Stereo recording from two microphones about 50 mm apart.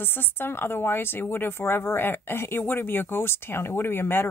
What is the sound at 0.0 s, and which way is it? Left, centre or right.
A woman's voice, left.